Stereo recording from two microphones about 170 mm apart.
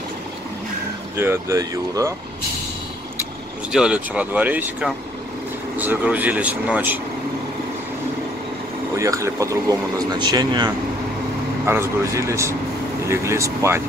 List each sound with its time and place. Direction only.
1.1 s speech: 15° right (ahead or behind)
3.7 s speech: 5° right (ahead or behind)
8.9 s speech: 20° right (ahead or behind)
11.6 s speech: 15° right (ahead or behind)